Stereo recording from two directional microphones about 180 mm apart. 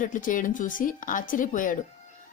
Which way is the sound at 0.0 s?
50° left (ahead or behind).